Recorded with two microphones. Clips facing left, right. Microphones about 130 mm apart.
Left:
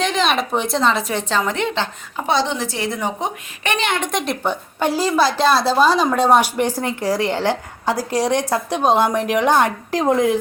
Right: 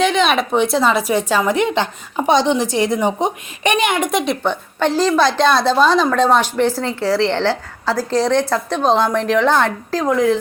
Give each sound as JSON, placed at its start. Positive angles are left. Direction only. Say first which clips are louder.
{"t": 0.0, "sound": "speech", "louder": "right 4 dB", "side_deg": 0}
{"t": 4.8, "sound": "a woman's voice", "louder": "right 3 dB", "side_deg": 10}